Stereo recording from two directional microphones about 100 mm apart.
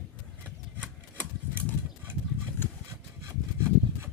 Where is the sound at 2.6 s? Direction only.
20° left (ahead or behind).